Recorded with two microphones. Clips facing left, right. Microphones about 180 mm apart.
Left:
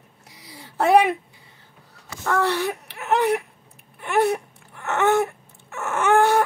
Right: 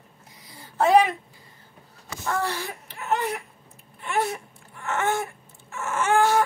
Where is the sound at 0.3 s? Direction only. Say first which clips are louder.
Left 4 dB; 75° left (ahead or behind).